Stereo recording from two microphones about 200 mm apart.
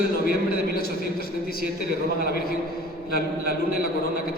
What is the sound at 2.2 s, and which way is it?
A man's voice, 50° left (ahead or behind).